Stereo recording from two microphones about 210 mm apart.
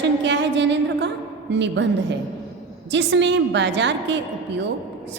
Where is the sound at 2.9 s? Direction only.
60° right (ahead or behind).